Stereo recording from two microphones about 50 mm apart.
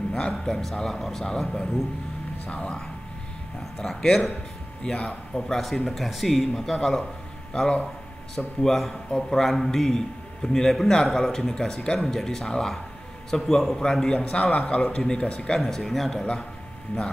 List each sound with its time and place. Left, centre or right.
0.1 s speech: centre
0.6 s a man's voice: centre
5.3 s speech: centre
8.4 s a man's voice: centre
15.6 s speech: centre